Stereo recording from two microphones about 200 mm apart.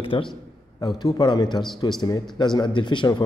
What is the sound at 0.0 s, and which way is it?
A man's voice, 25° left (ahead or behind).